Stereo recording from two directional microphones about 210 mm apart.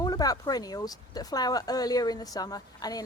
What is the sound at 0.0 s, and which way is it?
Speech, 20° left (ahead or behind).